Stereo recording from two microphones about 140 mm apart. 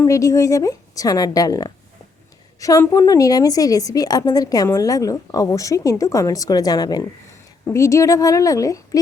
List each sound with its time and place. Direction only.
0.0 s a woman's voice: 20° left (ahead or behind)